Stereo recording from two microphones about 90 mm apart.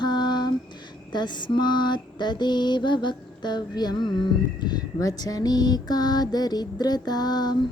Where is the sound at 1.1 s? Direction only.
55° left (ahead or behind).